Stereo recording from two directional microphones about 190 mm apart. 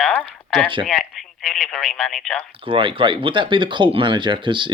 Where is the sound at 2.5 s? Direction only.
30° right (ahead or behind).